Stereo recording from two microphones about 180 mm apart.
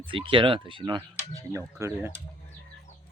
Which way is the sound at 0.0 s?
30° right (ahead or behind).